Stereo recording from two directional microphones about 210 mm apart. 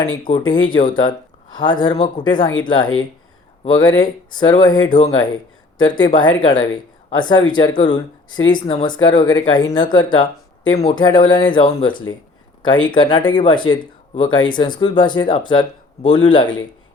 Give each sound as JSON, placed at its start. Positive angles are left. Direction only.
{"t": 0.2, "sound": "speech", "side_deg": 20}